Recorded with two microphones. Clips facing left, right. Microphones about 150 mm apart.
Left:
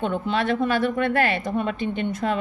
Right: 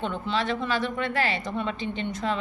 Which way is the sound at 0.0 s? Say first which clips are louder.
Left 4 dB; 50° left (ahead or behind).